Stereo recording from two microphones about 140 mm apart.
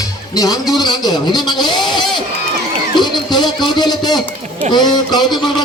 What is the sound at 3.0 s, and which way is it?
A man's voice, 30° left (ahead or behind).